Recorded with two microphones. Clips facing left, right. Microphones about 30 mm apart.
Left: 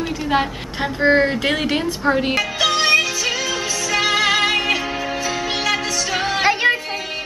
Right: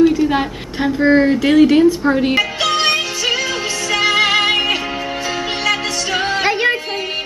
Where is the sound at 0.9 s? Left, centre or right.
Centre.